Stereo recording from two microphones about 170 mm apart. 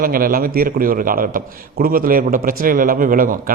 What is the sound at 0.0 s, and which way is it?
A man's voice, 60° right (ahead or behind).